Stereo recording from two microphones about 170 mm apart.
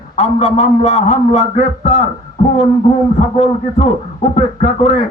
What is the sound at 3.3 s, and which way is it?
Speech, 40° left (ahead or behind).